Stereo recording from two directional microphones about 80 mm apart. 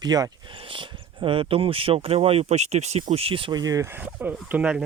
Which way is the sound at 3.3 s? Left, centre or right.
Right.